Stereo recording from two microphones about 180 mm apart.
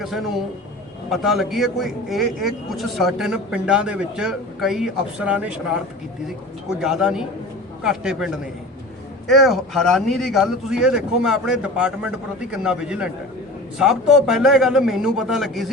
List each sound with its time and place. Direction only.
0.0 s a man's voice: centre (ahead or behind)